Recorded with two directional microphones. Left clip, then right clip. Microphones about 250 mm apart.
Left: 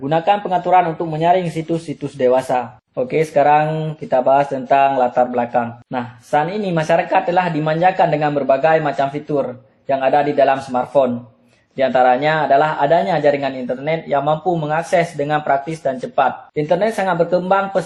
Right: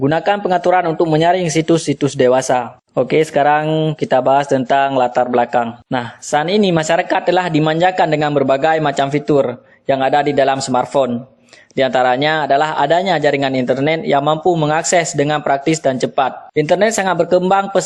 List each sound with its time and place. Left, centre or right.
0.0 s speech: right